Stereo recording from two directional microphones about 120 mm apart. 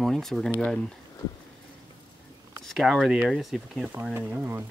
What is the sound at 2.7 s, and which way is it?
Speech, centre (ahead or behind).